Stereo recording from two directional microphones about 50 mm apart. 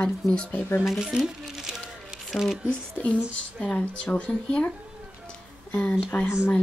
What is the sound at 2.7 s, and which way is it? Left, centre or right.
Speech, left.